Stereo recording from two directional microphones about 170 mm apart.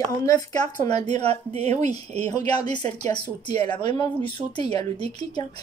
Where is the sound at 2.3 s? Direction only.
25° left (ahead or behind).